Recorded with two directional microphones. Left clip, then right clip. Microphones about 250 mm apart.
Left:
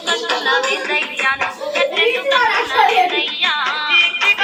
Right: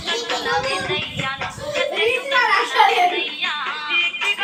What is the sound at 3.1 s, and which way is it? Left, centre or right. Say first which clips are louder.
Music: left 6 dB; left.